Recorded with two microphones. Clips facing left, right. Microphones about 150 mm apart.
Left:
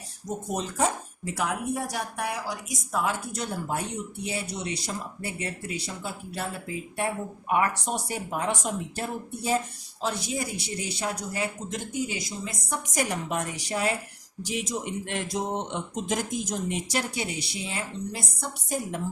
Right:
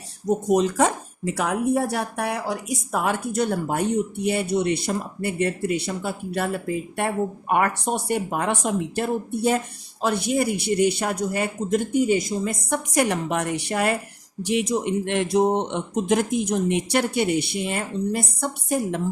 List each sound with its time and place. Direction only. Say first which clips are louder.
0.3 s speech: right 12 dB; 75° right (ahead or behind)